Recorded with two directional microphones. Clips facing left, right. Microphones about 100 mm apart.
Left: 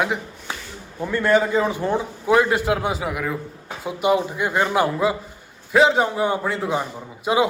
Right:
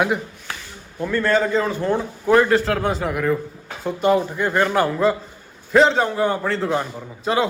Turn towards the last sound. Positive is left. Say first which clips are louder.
# even
turn(degrees=10)  # may be behind; listen again after turning